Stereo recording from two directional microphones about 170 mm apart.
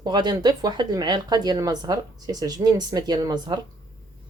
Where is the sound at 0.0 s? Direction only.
25° right (ahead or behind).